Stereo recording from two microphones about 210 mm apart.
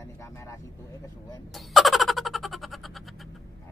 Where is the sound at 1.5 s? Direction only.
Centre (ahead or behind).